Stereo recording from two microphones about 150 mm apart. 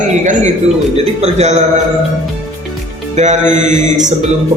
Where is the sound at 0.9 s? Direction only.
45° right (ahead or behind).